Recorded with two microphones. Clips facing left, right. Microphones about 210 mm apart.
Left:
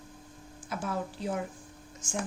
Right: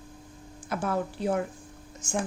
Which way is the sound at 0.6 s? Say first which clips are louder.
Right 5 dB; 60° right (ahead or behind).